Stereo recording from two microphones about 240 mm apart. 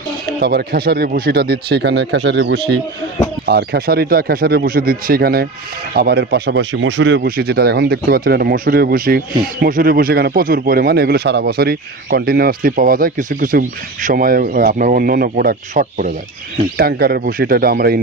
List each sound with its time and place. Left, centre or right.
0.3 s speech: right